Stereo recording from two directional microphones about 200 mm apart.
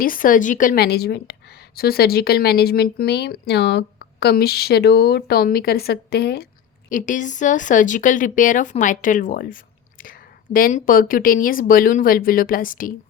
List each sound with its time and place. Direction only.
0.0 s a woman's voice: 45° left (ahead or behind)
6.9 s a woman's voice: 40° left (ahead or behind)